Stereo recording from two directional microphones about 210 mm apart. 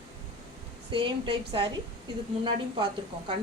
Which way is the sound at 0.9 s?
25° right (ahead or behind).